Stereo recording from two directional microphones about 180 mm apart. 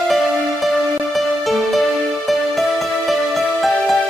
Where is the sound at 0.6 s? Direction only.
Centre (ahead or behind).